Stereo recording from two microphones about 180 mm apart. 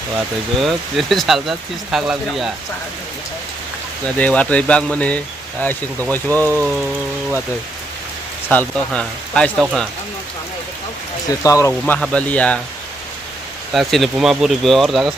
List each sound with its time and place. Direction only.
0.6 s speech: centre (ahead or behind)
4.2 s speech: 10° left (ahead or behind)
6.5 s rain on surface: 15° right (ahead or behind)
8.4 s speech: 5° left (ahead or behind)
11.3 s speech: 20° left (ahead or behind)
11.9 s speech: 5° left (ahead or behind)
13.7 s speech: centre (ahead or behind)